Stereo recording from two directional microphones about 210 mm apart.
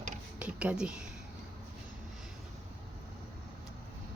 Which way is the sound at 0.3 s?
5° right (ahead or behind).